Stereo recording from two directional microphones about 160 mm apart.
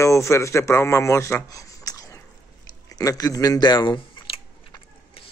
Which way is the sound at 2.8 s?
20° left (ahead or behind).